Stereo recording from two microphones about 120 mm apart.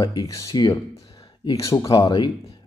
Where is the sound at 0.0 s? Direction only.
35° left (ahead or behind).